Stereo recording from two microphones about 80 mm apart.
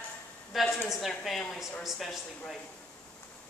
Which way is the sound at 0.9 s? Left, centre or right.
Centre.